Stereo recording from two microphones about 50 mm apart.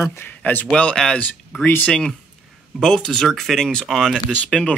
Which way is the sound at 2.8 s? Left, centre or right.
Centre.